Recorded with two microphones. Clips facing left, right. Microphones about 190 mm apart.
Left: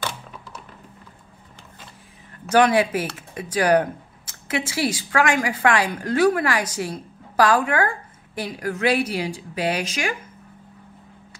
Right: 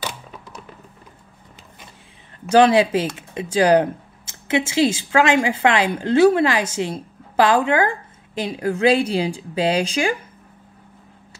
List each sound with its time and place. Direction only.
2.4 s speech: 30° right (ahead or behind)